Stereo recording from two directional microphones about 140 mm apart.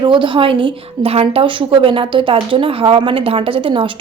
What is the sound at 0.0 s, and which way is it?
A woman's voice, 35° right (ahead or behind).